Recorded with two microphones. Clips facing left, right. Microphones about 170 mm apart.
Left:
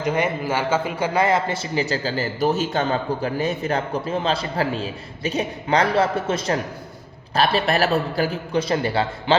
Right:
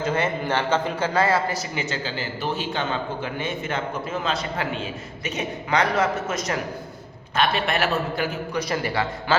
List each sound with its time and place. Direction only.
0.0 s a man's voice: 15° left (ahead or behind)